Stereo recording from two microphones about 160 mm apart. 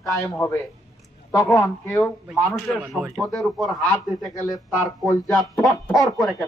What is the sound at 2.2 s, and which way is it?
A man's voice, centre (ahead or behind).